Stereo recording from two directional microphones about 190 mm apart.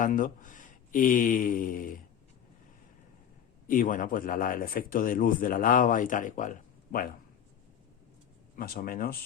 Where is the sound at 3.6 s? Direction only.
45° left (ahead or behind).